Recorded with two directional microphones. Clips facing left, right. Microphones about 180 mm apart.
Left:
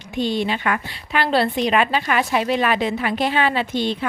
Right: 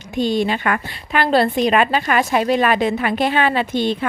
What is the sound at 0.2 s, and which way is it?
A woman's voice, 45° right (ahead or behind).